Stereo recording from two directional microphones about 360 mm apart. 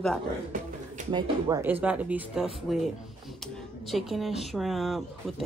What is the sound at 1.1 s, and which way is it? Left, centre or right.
Speech, centre.